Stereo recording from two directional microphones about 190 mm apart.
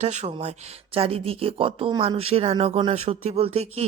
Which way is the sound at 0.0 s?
35° right (ahead or behind).